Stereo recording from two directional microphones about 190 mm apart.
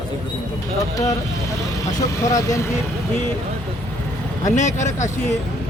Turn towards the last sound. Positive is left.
turn(degrees=40)  # may be behind; listen again after turning